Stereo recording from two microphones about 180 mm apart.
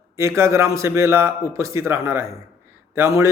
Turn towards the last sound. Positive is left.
turn(degrees=-15)  # may be behind; listen again after turning